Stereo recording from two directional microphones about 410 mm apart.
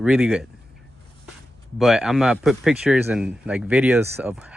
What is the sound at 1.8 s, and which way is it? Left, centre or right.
Speech, centre.